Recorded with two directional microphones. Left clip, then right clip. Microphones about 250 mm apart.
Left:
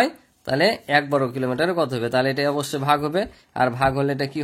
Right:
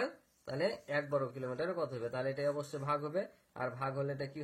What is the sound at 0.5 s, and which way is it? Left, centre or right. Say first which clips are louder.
Speech: left 17 dB; left.